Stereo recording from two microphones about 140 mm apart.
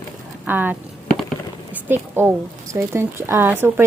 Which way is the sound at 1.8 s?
15° right (ahead or behind).